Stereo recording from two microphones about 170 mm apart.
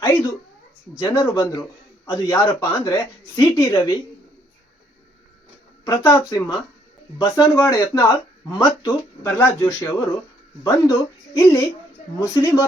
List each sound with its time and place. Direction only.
0.0 s speech: 15° left (ahead or behind)
5.8 s speech: 15° left (ahead or behind)
11.3 s speech: 20° left (ahead or behind)